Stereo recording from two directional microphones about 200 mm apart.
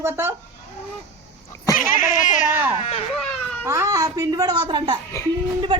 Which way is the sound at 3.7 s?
15° right (ahead or behind).